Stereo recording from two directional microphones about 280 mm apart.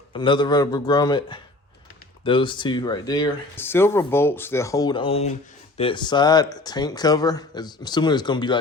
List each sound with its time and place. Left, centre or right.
0.1 s speech: centre